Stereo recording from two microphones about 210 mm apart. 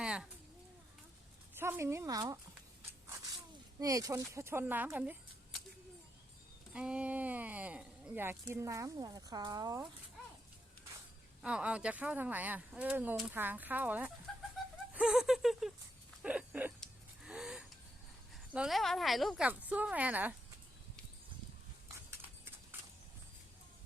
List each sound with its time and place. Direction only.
0.0 s a sound: 5° right (ahead or behind)
1.5 s speech: 10° right (ahead or behind)
3.8 s speech: 15° right (ahead or behind)
6.7 s speech: 5° right (ahead or behind)
11.4 s speech: 5° right (ahead or behind)
14.3 s bird: centre (ahead or behind)
14.9 s speech: 5° right (ahead or behind)
16.2 s a sound: 5° right (ahead or behind)
16.8 s gasp: 5° right (ahead or behind)
18.5 s speech: centre (ahead or behind)
21.8 s a sound: 10° right (ahead or behind)